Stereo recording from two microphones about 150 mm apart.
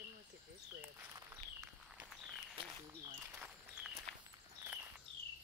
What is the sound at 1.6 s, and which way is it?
Walk, 5° right (ahead or behind).